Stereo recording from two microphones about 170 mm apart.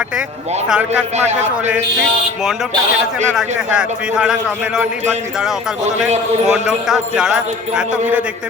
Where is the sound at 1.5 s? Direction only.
5° right (ahead or behind).